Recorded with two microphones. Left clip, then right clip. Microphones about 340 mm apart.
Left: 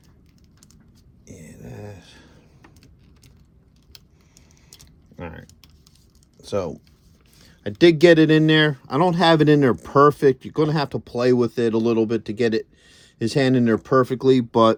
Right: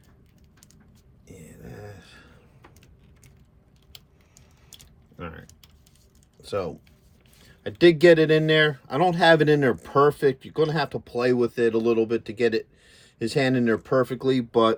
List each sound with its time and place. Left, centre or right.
1.6 s a sound: centre
5.1 s typing: centre
6.4 s speech: centre